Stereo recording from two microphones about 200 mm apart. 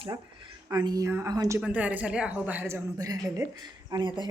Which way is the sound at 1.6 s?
5° right (ahead or behind).